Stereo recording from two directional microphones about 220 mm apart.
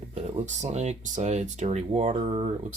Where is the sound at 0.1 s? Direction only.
30° right (ahead or behind).